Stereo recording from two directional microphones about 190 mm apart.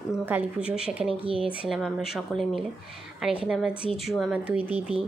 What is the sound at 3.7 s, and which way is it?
Speech, 30° left (ahead or behind).